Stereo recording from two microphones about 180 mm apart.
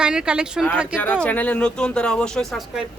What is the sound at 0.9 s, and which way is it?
A woman's voice, 10° left (ahead or behind).